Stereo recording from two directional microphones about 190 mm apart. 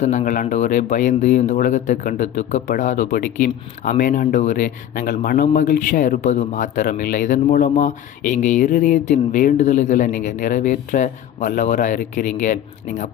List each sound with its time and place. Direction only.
0.0 s speech: 35° left (ahead or behind)